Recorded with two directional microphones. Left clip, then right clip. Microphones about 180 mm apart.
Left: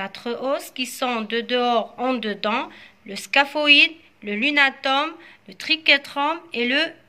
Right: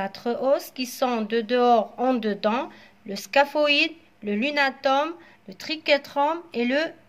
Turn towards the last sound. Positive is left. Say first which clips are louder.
# left 3 dB
turn(degrees=-40)  # may be behind; listen again after turning